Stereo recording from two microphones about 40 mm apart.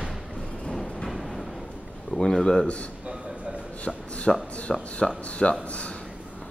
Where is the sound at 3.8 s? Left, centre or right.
Left.